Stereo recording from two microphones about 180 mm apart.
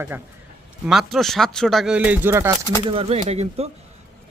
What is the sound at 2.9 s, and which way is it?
Speech, 35° right (ahead or behind).